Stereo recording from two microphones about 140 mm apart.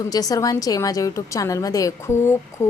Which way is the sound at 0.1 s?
25° left (ahead or behind).